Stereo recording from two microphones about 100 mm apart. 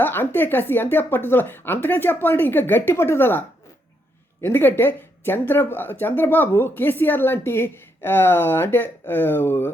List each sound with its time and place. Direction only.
0.0 s speech: 20° left (ahead or behind)